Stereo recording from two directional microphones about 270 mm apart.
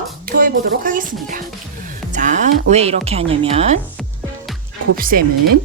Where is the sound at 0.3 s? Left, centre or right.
Right.